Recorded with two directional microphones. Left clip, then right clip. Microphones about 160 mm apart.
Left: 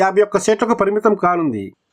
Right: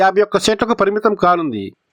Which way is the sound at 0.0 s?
25° right (ahead or behind).